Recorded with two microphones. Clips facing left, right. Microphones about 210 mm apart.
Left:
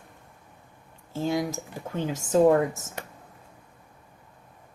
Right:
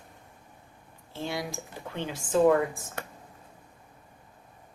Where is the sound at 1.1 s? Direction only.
45° left (ahead or behind).